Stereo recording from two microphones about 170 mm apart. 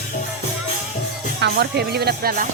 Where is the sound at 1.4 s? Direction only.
70° right (ahead or behind).